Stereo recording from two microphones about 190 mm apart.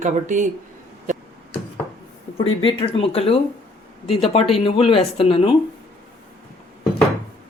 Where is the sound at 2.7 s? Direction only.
30° left (ahead or behind).